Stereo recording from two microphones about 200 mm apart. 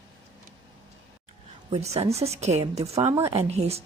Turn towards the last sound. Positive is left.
turn(degrees=-30)  # may be behind; listen again after turning